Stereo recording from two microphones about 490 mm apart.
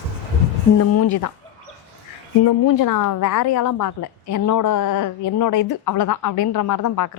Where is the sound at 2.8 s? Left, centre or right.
Left.